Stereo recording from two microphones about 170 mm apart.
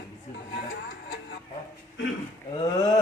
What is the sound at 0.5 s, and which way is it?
Music, 65° left (ahead or behind).